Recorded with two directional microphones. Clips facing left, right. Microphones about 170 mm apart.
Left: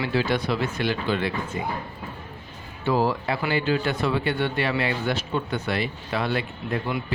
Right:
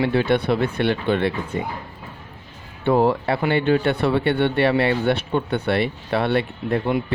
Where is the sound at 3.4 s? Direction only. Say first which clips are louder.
Right 5 dB; 55° right (ahead or behind).